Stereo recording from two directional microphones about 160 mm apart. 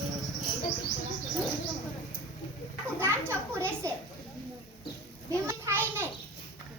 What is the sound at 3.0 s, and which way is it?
Children playing, 15° right (ahead or behind).